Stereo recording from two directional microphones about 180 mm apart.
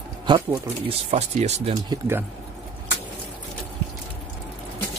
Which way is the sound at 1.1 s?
40° right (ahead or behind).